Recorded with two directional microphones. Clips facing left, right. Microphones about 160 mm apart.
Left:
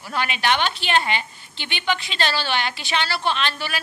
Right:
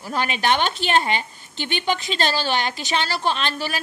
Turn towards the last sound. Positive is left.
turn(degrees=-40)  # may be behind; listen again after turning